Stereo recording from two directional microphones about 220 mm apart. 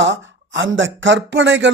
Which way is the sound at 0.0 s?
55° right (ahead or behind).